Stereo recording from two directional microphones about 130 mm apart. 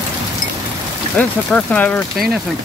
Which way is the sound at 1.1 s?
10° left (ahead or behind).